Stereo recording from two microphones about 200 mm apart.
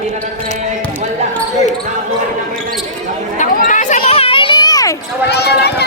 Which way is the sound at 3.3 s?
40° left (ahead or behind).